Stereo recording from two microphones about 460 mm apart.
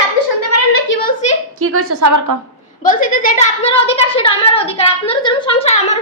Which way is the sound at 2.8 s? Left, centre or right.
Centre.